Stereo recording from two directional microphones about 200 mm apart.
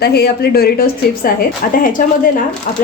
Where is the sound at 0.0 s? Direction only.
55° left (ahead or behind).